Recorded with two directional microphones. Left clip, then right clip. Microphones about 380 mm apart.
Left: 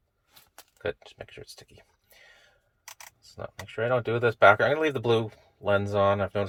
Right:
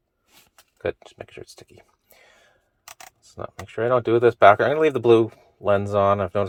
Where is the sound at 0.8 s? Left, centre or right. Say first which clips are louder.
Right 5 dB; centre.